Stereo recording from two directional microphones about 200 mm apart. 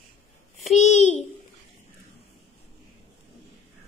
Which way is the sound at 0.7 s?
35° left (ahead or behind).